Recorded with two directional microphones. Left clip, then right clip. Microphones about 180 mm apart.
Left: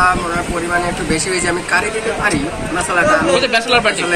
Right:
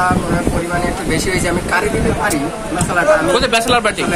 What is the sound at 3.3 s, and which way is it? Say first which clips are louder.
Speech: even; 40° right (ahead or behind).